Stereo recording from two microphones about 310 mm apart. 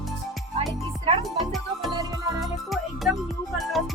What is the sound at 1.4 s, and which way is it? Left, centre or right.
Music, centre.